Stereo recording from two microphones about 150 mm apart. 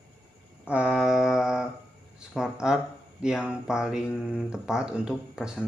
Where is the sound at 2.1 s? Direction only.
5° right (ahead or behind).